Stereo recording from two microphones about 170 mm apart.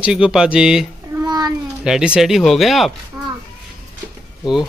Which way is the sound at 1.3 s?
25° right (ahead or behind).